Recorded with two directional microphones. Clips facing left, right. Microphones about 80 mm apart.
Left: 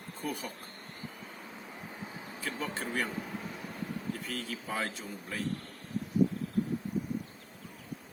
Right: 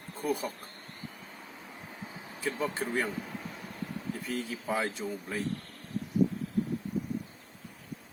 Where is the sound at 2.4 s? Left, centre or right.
Centre.